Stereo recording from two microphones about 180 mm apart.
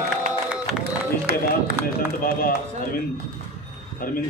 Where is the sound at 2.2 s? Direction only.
55° left (ahead or behind).